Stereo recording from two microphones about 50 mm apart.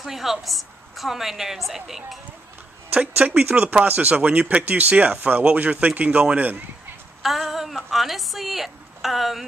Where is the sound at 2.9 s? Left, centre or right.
Right.